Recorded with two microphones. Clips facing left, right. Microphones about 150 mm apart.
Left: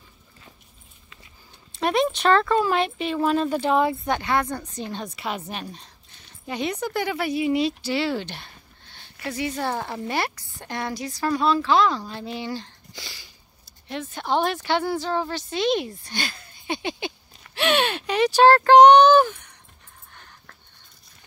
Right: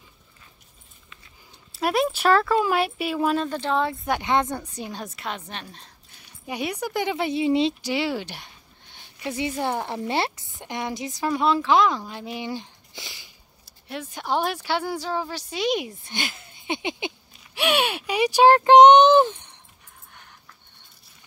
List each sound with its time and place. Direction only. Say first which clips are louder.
1.7 s speech: left 1 dB; 5° right (ahead or behind)
3.3 s speech: left 3 dB; 10° left (ahead or behind)
4.2 s speech: right 1 dB; 20° right (ahead or behind); by 5.9 s 5° left (ahead or behind)
6.1 s speech: left 1 dB; 10° right (ahead or behind); by 7.7 s 25° right (ahead or behind)
7.8 s a sound: left 1 dB; 15° right (ahead or behind)
9.2 s a woman's voice: right 1 dB; 20° right (ahead or behind)
12.1 s a sound: left 1 dB; 15° right (ahead or behind)
13.8 s speech: left 1 dB; 10° right (ahead or behind); by 19.6 s 25° right (ahead or behind)
20.1 s a sound: left 1 dB; 10° right (ahead or behind)